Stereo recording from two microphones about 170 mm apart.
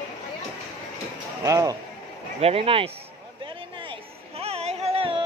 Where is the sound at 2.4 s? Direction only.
35° right (ahead or behind).